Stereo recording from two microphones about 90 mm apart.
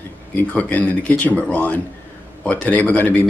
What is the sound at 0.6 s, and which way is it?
Speech, 15° left (ahead or behind).